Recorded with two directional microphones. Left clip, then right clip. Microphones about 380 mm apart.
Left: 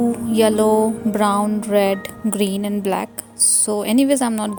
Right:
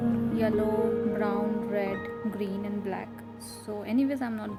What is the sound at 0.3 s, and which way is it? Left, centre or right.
Speech, left.